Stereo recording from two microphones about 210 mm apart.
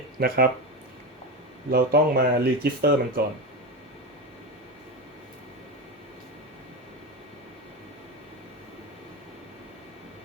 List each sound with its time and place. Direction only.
0.2 s speech: 45° right (ahead or behind)
1.7 s speech: 45° right (ahead or behind)